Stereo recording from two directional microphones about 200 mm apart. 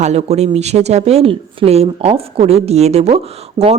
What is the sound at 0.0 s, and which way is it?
Speech, 35° right (ahead or behind).